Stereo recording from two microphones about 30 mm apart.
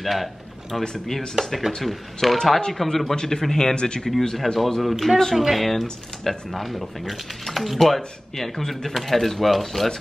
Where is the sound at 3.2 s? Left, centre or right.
Left.